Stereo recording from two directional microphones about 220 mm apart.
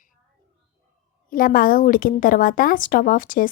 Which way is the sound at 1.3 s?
40° left (ahead or behind).